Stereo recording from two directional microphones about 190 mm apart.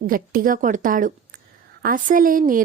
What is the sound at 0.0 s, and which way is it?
A woman's voice, 50° right (ahead or behind).